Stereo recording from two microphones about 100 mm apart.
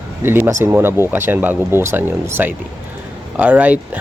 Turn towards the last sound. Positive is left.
turn(degrees=-15)  # may be behind; listen again after turning